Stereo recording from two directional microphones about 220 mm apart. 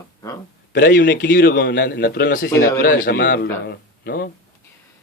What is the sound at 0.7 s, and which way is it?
A man's voice, 40° left (ahead or behind).